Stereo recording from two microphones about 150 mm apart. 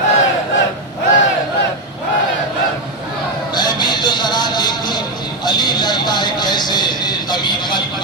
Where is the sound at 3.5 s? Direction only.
30° left (ahead or behind).